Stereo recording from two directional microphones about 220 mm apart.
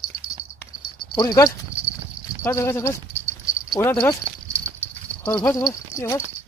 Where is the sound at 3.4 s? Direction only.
15° left (ahead or behind).